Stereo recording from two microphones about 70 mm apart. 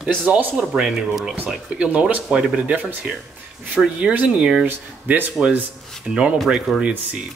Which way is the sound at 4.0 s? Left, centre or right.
Centre.